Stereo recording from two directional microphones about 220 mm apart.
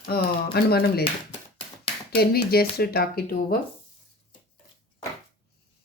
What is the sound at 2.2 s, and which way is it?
Speech, 45° left (ahead or behind).